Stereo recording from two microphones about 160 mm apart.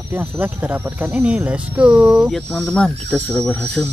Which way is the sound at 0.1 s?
15° right (ahead or behind).